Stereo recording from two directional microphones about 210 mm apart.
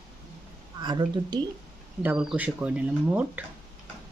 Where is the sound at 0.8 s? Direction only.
20° right (ahead or behind).